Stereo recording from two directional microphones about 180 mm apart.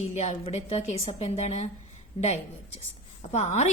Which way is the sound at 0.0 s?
35° left (ahead or behind).